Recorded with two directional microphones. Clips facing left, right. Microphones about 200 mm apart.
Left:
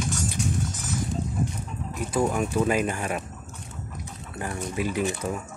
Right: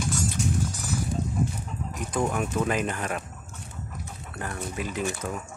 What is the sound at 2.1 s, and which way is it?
Speech, 5° left (ahead or behind).